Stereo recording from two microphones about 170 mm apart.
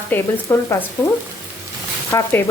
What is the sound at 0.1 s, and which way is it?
Speech, 10° left (ahead or behind).